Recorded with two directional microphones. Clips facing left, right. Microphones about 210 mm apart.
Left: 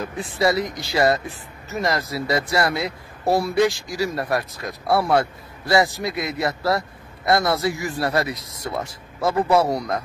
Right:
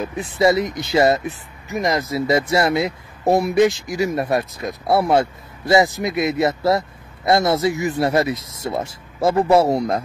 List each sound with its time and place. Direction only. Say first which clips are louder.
0.4 s speech: right 4 dB; 20° right (ahead or behind)